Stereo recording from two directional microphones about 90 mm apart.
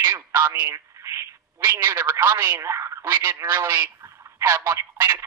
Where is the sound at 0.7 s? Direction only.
35° right (ahead or behind).